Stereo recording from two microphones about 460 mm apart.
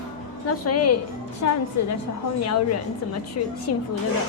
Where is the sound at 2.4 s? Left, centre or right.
Left.